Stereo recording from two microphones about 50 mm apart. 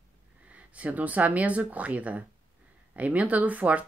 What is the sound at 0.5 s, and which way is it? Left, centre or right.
Speech, right.